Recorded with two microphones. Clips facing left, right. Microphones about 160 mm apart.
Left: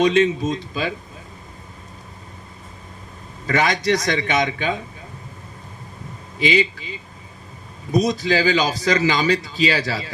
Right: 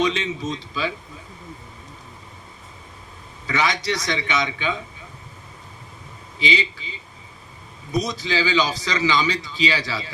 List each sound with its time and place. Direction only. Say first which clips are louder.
0.0 s a man's voice: left 7 dB; 50° left (ahead or behind)
3.4 s a man's voice: left 4 dB; 50° left (ahead or behind)
6.4 s a man's voice: left 5 dB; 50° left (ahead or behind)
7.9 s a man's voice: left 5 dB; 50° left (ahead or behind)